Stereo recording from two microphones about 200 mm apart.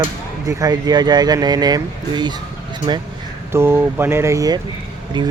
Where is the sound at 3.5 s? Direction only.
10° right (ahead or behind).